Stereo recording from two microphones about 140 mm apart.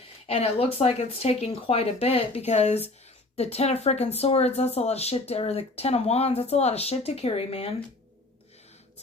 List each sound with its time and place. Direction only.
0.3 s speech: 45° left (ahead or behind)